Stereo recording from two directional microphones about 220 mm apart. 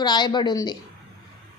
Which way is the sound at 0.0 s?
20° left (ahead or behind).